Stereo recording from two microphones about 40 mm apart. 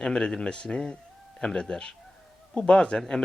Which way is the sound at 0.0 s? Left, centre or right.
Left.